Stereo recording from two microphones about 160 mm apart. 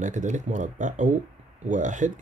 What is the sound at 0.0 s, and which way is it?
Speech, 50° right (ahead or behind).